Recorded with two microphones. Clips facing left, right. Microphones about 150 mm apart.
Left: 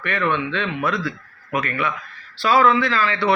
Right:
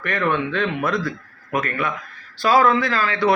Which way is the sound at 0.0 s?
45° right (ahead or behind).